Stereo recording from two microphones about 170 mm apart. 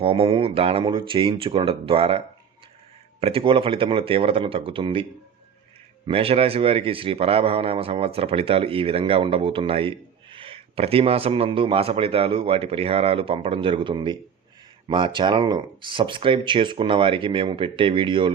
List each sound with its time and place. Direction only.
0.0 s speech: 35° right (ahead or behind)
6.1 s speech: 35° right (ahead or behind)